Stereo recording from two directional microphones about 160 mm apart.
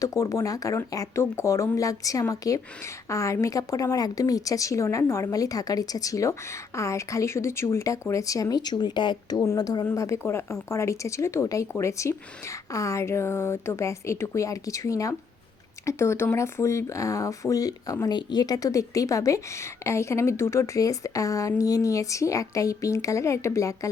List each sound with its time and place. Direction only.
0.0 s a woman's voice: 20° left (ahead or behind)